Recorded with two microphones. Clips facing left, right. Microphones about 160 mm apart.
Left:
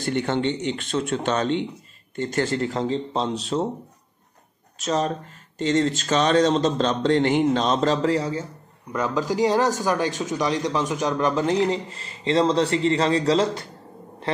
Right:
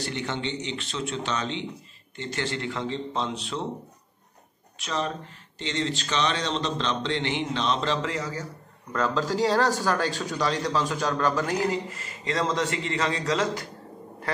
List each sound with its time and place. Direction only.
0.0 s a man's voice: 50° left (ahead or behind)
4.7 s speech: 40° left (ahead or behind)
8.9 s speech: 15° left (ahead or behind); by 13.7 s 30° left (ahead or behind)